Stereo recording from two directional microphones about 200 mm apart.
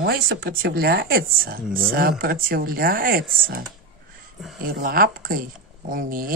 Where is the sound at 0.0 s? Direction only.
50° right (ahead or behind).